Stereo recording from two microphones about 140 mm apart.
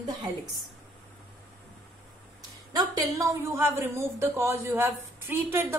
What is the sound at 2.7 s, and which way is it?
A woman's voice, 25° right (ahead or behind).